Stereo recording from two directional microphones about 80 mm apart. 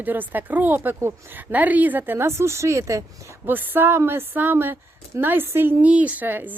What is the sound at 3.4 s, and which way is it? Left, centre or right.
Speech, right.